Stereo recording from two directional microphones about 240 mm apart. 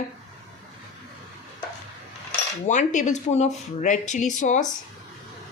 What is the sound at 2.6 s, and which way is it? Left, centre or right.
A woman's voice, left.